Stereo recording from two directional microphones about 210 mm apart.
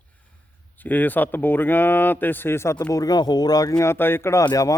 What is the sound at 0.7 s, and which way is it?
Speech, 10° left (ahead or behind).